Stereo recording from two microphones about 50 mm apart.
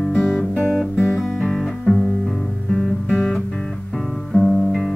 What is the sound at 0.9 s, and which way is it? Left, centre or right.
Guitar, centre.